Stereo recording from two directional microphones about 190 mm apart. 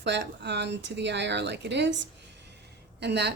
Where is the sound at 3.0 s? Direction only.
60° right (ahead or behind).